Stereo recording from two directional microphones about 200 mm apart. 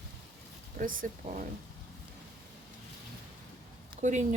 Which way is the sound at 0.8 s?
40° right (ahead or behind).